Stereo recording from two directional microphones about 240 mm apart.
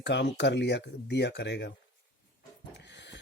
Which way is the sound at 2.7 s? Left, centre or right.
Left.